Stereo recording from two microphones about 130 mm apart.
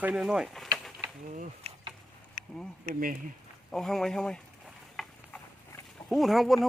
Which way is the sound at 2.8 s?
90° right.